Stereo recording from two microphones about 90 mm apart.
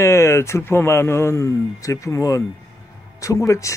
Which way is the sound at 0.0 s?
30° left (ahead or behind).